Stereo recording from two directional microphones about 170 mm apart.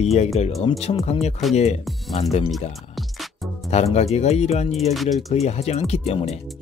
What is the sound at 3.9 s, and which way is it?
Speech, 40° left (ahead or behind).